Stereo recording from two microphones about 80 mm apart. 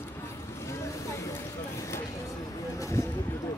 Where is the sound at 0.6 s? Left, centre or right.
Left.